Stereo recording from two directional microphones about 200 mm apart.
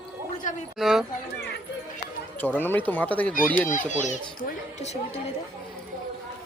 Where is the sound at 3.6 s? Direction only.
40° left (ahead or behind).